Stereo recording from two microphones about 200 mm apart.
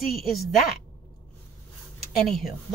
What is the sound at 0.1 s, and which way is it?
Speech, centre (ahead or behind).